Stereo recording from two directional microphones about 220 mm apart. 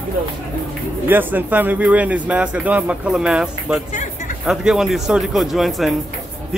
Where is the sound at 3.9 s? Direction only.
35° left (ahead or behind).